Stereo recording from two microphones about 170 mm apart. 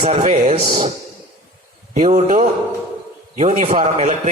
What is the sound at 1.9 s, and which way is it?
A man's voice, 45° right (ahead or behind).